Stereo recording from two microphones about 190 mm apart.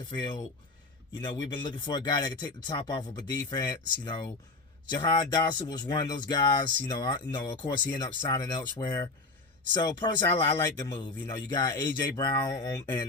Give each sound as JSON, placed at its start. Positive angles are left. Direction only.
{"t": 0.1, "sound": "speech", "side_deg": 25}
{"t": 8.2, "sound": "speech", "side_deg": 25}